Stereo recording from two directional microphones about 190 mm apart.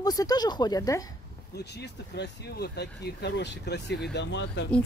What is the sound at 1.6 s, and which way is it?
Speech, 60° left (ahead or behind).